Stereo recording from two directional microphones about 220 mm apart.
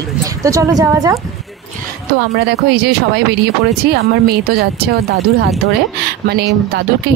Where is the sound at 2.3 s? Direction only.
45° right (ahead or behind).